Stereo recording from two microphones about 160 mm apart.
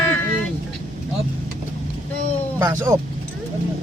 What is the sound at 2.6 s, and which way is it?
Speech, 15° right (ahead or behind).